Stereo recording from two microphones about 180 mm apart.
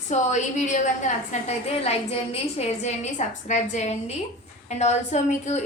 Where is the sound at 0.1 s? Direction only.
40° left (ahead or behind).